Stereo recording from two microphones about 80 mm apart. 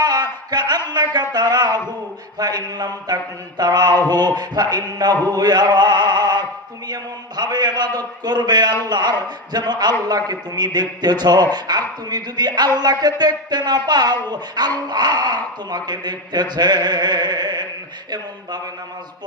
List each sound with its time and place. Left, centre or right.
0.0 s a man's voice: right
5.3 s chant: right
6.8 s a man's voice: right